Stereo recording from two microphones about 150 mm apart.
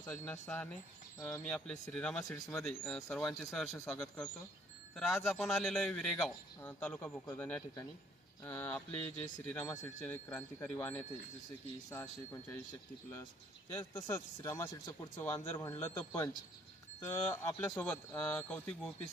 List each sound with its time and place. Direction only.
0.0 s speech: 15° left (ahead or behind)
13.7 s speech: 15° left (ahead or behind)
14.7 s speech: 30° left (ahead or behind)
15.2 s speech: 15° left (ahead or behind)